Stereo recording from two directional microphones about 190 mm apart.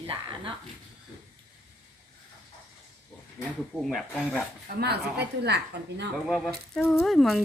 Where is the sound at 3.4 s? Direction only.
15° left (ahead or behind).